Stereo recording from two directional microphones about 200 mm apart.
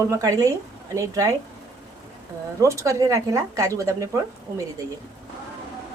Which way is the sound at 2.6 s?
15° right (ahead or behind).